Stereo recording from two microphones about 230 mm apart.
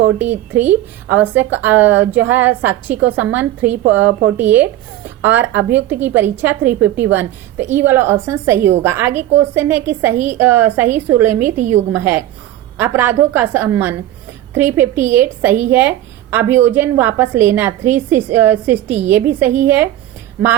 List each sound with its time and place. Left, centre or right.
0.5 s a woman's voice: centre
11.4 s a woman's voice: right
11.9 s a woman's voice: centre